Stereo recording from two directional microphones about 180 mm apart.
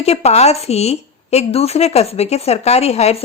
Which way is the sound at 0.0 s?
35° left (ahead or behind).